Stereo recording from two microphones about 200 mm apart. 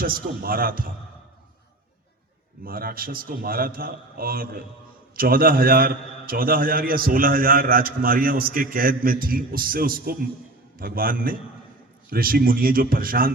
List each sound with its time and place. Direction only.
0.0 s a man's voice: 45° right (ahead or behind)
2.6 s a man's voice: 45° right (ahead or behind)